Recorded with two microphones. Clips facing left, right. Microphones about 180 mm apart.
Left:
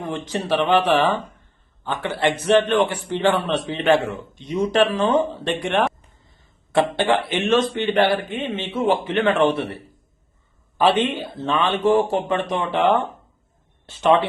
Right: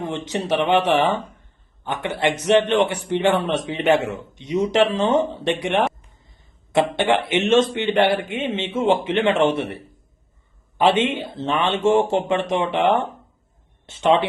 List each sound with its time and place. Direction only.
0.3 s a man's voice: 20° right (ahead or behind)